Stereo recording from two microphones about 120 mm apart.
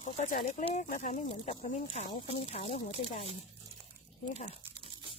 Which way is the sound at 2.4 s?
65° left (ahead or behind).